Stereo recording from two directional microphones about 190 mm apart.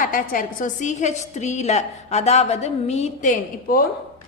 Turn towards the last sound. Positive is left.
turn(degrees=45)  # may be behind; listen again after turning